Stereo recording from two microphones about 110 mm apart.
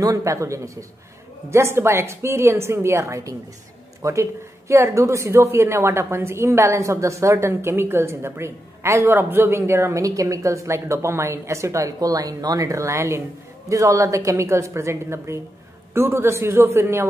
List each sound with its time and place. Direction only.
0.0 s speech: 30° right (ahead or behind)